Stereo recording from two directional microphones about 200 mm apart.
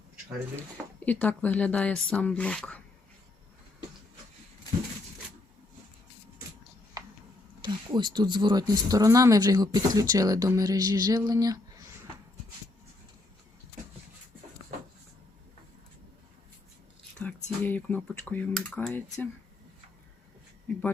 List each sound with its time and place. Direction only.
0.5 s speech: 10° left (ahead or behind)
7.6 s speech: 20° right (ahead or behind)
17.2 s a sound: 5° left (ahead or behind)
17.6 s speech: 10° left (ahead or behind)